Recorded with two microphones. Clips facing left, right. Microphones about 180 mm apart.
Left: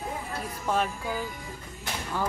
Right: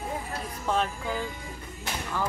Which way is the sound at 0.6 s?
5° left (ahead or behind).